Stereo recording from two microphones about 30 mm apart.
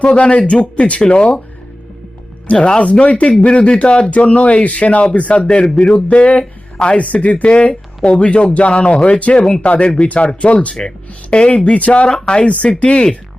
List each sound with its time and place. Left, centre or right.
0.0 s speech: left
0.9 s speech: left
2.6 s speech: left
4.6 s speech: left
5.4 s speech: left
6.1 s speech: left
12.2 s speech: left